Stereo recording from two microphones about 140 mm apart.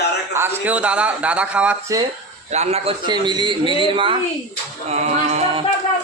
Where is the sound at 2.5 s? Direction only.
50° right (ahead or behind).